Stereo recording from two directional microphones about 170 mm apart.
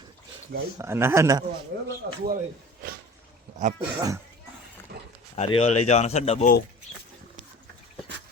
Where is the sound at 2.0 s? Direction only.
90° right.